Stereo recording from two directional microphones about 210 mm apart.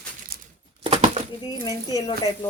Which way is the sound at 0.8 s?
25° right (ahead or behind).